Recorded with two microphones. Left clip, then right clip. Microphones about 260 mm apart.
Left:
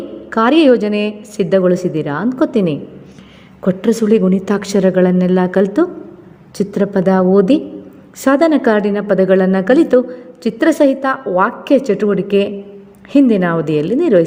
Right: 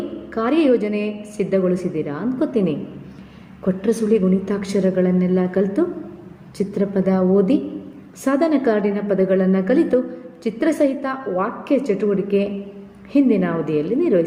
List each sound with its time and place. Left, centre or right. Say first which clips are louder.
0.3 s a woman's voice: left 7 dB; left